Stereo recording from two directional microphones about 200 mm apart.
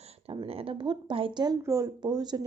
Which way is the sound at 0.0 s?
30° right (ahead or behind).